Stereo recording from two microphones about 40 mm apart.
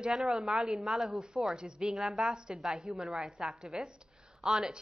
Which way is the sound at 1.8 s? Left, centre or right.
Centre.